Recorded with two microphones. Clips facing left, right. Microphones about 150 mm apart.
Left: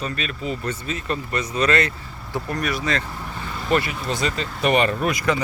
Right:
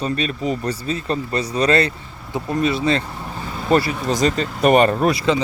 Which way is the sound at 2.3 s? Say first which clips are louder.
Right 5 dB; 20° right (ahead or behind).